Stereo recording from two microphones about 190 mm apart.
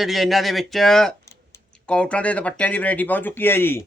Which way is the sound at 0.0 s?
Centre (ahead or behind).